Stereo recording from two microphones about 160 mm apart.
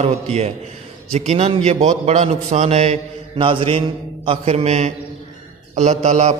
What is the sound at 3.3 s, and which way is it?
A man's voice, 35° right (ahead or behind).